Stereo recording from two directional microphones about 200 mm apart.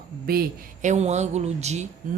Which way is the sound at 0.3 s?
50° right (ahead or behind).